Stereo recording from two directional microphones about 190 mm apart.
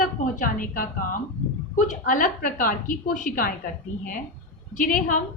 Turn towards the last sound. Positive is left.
turn(degrees=45)  # may be behind; listen again after turning